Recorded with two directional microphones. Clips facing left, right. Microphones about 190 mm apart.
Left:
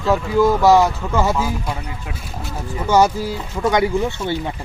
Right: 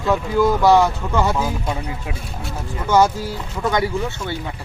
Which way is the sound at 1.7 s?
25° right (ahead or behind).